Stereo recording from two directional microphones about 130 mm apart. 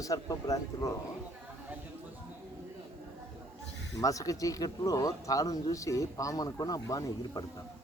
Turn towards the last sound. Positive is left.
turn(degrees=25)  # may be behind; listen again after turning